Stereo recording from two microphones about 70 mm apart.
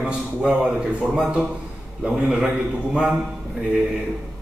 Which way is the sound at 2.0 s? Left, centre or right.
Centre.